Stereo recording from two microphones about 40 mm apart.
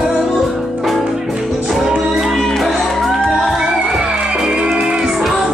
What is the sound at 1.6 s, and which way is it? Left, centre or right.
Music, centre.